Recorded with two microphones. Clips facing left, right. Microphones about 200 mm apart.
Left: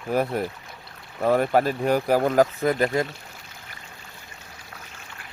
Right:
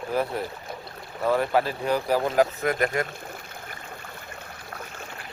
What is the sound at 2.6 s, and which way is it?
Speech, 30° left (ahead or behind).